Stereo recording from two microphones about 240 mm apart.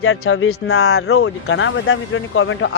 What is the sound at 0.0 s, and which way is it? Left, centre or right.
Speech, left.